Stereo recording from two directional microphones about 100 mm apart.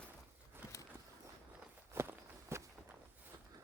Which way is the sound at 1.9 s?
25° right (ahead or behind).